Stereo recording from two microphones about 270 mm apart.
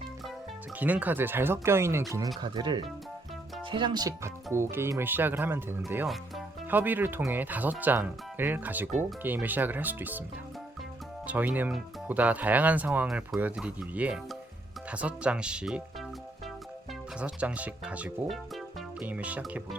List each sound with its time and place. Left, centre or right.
0.8 s speech: centre
11.3 s speech: centre
17.2 s speech: centre